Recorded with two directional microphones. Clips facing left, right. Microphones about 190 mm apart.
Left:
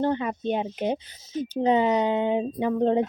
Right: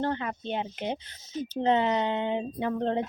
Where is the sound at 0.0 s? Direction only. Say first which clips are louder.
Left 5 dB; 15° left (ahead or behind).